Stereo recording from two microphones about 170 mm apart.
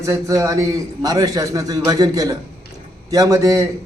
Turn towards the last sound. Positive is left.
turn(degrees=-20)  # may be behind; listen again after turning